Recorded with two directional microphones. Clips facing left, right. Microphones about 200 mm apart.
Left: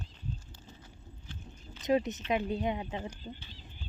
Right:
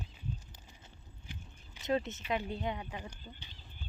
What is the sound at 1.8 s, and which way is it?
A woman's voice, 15° left (ahead or behind).